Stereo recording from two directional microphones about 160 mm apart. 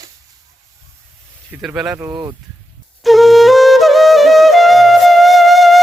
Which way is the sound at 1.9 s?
20° right (ahead or behind).